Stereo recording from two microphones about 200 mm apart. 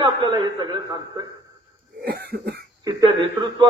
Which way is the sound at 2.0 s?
50° right (ahead or behind).